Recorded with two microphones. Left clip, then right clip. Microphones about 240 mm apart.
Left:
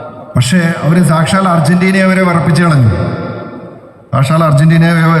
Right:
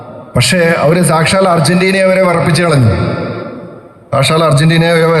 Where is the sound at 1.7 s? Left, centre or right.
Centre.